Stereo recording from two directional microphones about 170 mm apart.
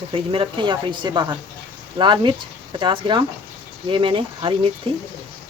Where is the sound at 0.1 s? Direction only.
30° right (ahead or behind).